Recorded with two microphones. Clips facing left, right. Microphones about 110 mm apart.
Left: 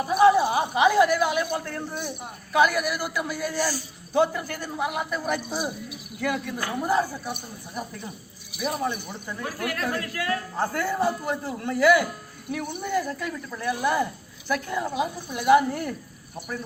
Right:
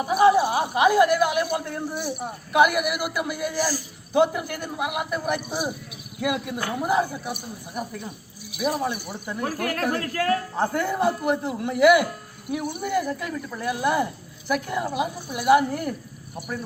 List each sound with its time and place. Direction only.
0.0 s speech: 5° right (ahead or behind)
8.5 s speech: 10° right (ahead or behind)
9.5 s speech: 40° right (ahead or behind)
10.5 s speech: 15° right (ahead or behind)